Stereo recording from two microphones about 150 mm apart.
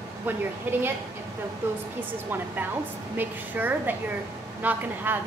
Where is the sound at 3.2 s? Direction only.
10° right (ahead or behind).